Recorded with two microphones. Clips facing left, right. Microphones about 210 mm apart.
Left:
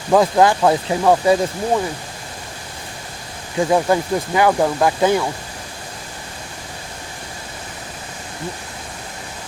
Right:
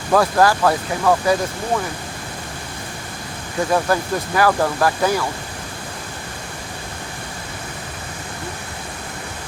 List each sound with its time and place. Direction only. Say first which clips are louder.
0.1 s speech: left 2 dB; 20° left (ahead or behind)
3.7 s speech: left 2 dB; 15° left (ahead or behind)